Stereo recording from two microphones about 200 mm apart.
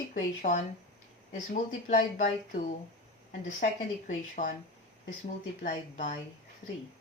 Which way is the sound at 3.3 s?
40° left (ahead or behind).